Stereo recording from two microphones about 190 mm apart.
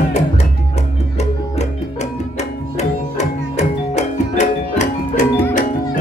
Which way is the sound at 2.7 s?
35° left (ahead or behind).